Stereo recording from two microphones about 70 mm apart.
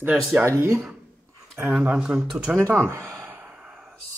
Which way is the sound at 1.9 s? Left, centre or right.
Centre.